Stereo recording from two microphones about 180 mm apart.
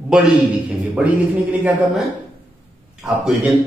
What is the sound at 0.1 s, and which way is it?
A man's voice, 5° right (ahead or behind).